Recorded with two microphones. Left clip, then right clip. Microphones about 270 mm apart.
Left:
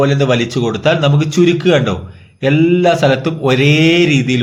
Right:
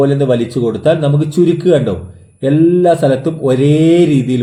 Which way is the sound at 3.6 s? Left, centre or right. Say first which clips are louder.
Right 1 dB; left.